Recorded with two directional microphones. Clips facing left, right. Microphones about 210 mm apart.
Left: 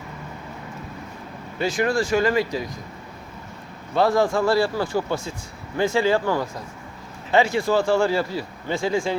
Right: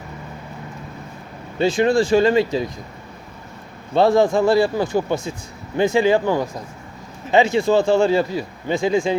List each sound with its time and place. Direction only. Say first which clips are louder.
1.5 s speech: right 6 dB; 25° right (ahead or behind)
3.9 s speech: right 4 dB; 25° right (ahead or behind)